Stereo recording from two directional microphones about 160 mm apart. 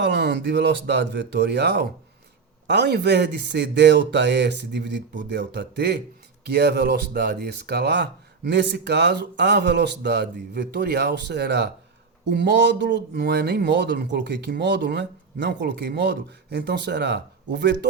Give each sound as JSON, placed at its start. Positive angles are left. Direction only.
{"t": 0.0, "sound": "speech", "side_deg": -90}